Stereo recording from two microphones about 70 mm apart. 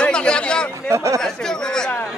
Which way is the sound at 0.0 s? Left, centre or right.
Centre.